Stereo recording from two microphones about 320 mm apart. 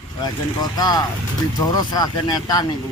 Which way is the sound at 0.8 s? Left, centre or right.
Centre.